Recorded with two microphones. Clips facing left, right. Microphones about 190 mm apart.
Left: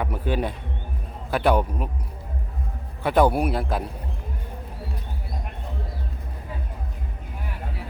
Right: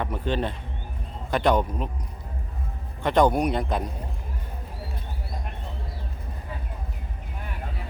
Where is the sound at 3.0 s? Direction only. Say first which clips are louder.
Left 1 dB; 5° left (ahead or behind).